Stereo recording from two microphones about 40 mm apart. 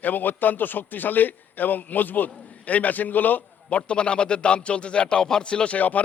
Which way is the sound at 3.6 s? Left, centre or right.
Left.